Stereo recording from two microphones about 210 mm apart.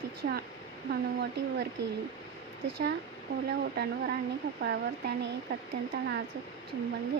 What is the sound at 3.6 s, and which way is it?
Speech, 50° right (ahead or behind).